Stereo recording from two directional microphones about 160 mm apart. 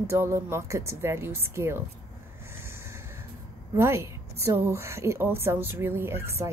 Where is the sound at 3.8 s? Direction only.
15° right (ahead or behind).